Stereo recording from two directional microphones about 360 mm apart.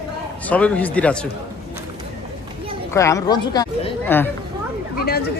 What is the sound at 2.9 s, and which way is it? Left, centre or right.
Speech, centre.